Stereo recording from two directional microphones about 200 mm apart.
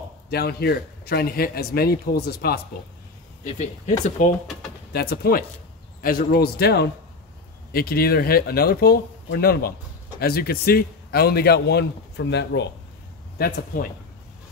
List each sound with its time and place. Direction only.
0.3 s a man's voice: 50° left (ahead or behind)
3.4 s speech: 35° left (ahead or behind)
4.9 s a man's voice: 50° left (ahead or behind)